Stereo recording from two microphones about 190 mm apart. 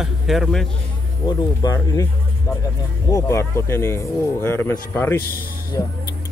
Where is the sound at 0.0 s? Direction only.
Centre (ahead or behind).